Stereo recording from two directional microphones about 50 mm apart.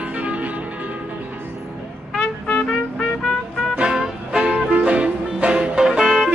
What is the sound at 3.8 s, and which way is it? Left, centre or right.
Music, centre.